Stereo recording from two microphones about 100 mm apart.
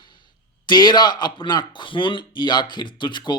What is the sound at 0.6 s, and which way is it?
Speech, 50° left (ahead or behind).